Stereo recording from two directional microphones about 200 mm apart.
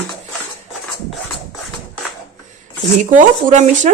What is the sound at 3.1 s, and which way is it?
Speech, 40° right (ahead or behind).